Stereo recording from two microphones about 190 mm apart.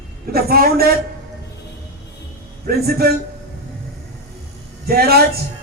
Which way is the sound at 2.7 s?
55° right (ahead or behind).